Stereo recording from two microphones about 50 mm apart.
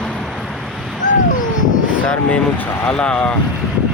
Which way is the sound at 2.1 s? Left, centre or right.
Left.